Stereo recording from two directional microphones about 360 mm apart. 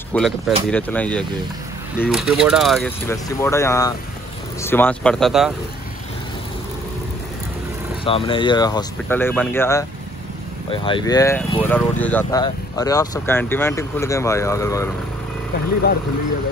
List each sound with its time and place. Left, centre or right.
0.1 s speech: centre
8.0 s speech: centre